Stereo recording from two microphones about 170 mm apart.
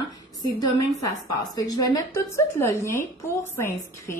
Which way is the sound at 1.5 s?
25° left (ahead or behind).